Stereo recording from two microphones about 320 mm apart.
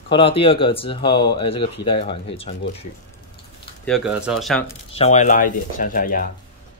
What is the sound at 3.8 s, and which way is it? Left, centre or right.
Speech, centre.